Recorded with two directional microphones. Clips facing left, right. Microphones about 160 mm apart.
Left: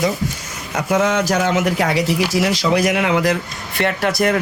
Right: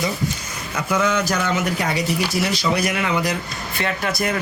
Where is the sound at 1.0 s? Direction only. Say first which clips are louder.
Left 3 dB; 75° left (ahead or behind).